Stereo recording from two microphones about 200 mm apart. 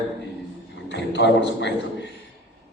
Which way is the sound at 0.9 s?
60° left (ahead or behind).